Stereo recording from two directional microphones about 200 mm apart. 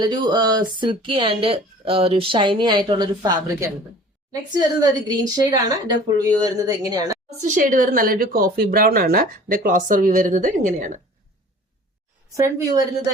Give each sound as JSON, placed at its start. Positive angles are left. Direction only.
{"t": 0.0, "sound": "a woman's voice", "side_deg": -20}
{"t": 7.4, "sound": "speech", "side_deg": -40}
{"t": 12.3, "sound": "a woman's voice", "side_deg": -15}